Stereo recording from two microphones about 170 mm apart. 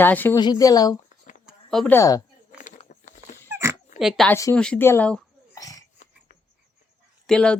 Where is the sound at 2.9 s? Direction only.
45° left (ahead or behind).